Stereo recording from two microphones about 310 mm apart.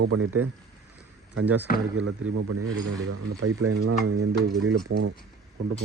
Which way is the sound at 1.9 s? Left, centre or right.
Right.